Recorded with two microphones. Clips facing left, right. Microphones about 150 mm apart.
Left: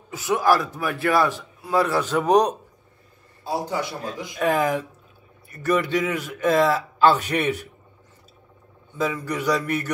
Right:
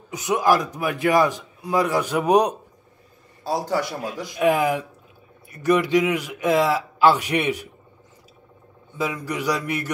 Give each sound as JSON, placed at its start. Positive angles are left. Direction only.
{"t": 0.1, "sound": "a man's voice", "side_deg": -20}
{"t": 4.0, "sound": "a man's voice", "side_deg": -10}
{"t": 8.9, "sound": "a man's voice", "side_deg": -10}